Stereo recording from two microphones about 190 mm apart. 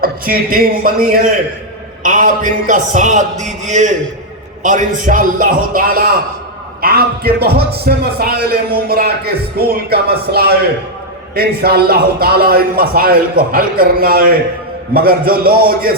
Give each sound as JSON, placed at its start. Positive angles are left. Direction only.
{"t": 0.0, "sound": "a man's voice", "side_deg": -50}